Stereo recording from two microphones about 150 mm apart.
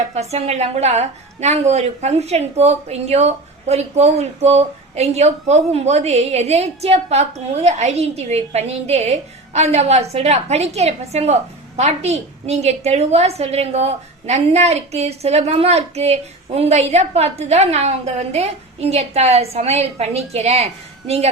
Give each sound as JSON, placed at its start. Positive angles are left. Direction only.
{"t": 0.1, "sound": "a woman's voice", "side_deg": -45}